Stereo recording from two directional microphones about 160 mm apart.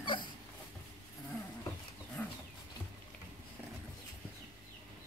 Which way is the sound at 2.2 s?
10° left (ahead or behind).